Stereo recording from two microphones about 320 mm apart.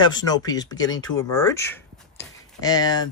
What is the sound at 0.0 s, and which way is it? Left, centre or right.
Speech, centre.